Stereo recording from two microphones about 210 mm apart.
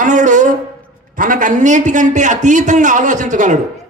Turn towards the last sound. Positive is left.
turn(degrees=-35)  # may be behind; listen again after turning